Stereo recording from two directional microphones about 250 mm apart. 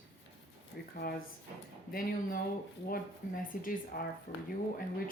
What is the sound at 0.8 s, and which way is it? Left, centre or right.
Speech, left.